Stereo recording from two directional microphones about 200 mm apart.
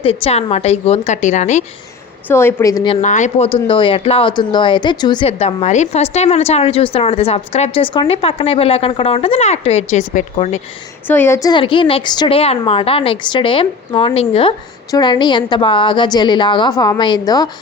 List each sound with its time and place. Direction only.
0.0 s a woman's voice: 30° left (ahead or behind)
2.2 s a woman's voice: 10° left (ahead or behind)
3.0 s speech: 35° left (ahead or behind)
11.1 s speech: 10° left (ahead or behind)